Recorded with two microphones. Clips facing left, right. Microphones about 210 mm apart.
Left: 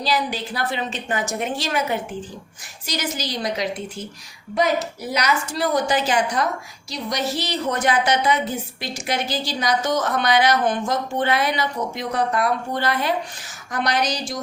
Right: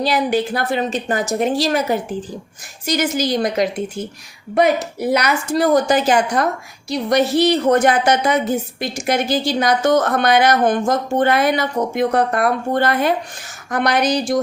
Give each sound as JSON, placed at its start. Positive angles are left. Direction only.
{"t": 0.0, "sound": "a woman's voice", "side_deg": -55}
{"t": 2.8, "sound": "a woman's voice", "side_deg": -50}